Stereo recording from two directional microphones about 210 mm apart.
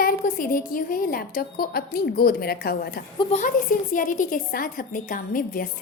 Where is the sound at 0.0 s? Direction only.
40° left (ahead or behind).